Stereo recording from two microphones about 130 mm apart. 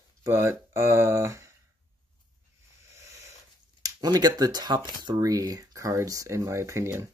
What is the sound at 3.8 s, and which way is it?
Speech, 30° right (ahead or behind).